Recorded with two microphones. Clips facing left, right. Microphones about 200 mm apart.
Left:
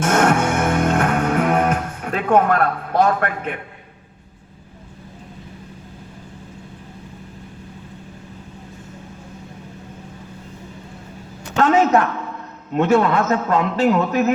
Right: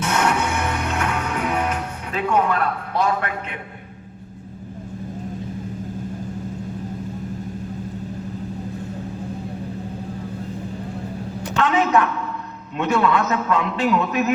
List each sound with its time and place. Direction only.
0.0 s music: 50° left (ahead or behind)
11.5 s a sound: 45° left (ahead or behind)
12.7 s a man's voice: 45° left (ahead or behind)